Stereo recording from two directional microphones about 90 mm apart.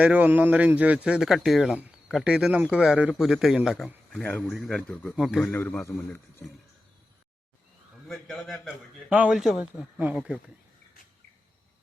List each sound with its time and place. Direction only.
0.0 s a man's voice: 15° right (ahead or behind)
4.2 s speech: 15° left (ahead or behind)
4.4 s a man's voice: 5° left (ahead or behind)
4.8 s speech: 20° left (ahead or behind)
5.1 s a man's voice: 5° right (ahead or behind)
5.4 s a man's voice: 20° left (ahead or behind)
8.0 s a man's voice: 5° left (ahead or behind)
8.6 s a man's voice: 10° right (ahead or behind)
10.0 s a man's voice: 20° right (ahead or behind)